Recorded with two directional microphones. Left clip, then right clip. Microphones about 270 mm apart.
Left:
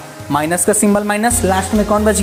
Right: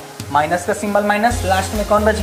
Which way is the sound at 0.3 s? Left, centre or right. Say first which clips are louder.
Left 1 dB; left.